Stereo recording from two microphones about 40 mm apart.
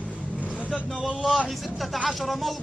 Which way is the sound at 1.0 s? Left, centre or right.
Centre.